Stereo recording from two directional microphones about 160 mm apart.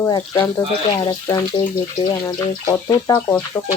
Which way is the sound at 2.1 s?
15° left (ahead or behind).